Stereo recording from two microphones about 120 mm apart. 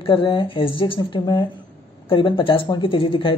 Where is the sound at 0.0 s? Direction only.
45° left (ahead or behind).